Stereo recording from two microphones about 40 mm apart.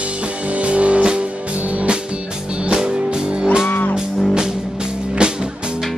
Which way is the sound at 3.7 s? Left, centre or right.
Left.